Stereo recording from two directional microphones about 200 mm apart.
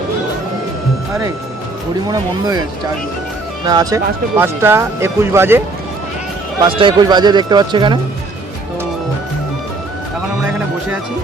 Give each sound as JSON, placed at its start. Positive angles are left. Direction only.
{"t": 2.0, "sound": "speech", "side_deg": -20}
{"t": 3.7, "sound": "speech", "side_deg": -20}
{"t": 6.7, "sound": "speech", "side_deg": -25}